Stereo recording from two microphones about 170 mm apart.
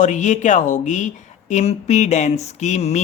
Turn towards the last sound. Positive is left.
turn(degrees=40)  # may be behind; listen again after turning